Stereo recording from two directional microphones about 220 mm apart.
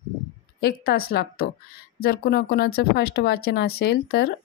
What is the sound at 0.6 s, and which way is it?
A woman's voice, 45° left (ahead or behind).